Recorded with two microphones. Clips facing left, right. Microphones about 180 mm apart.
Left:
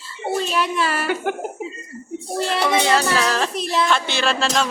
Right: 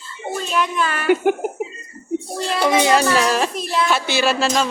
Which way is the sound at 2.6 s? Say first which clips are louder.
Right 4 dB; 15° right (ahead or behind).